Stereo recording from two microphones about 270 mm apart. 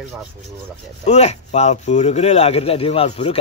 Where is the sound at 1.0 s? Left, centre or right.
Left.